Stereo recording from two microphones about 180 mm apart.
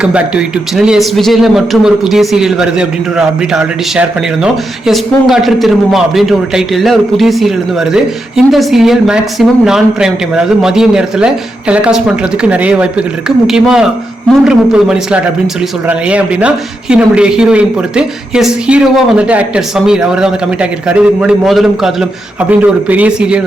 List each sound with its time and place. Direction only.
0.0 s a man's voice: 5° right (ahead or behind)